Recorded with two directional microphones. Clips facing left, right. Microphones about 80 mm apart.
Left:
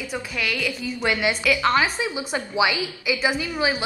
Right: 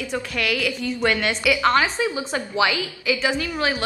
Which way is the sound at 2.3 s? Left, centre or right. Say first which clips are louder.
Right 1 dB; centre.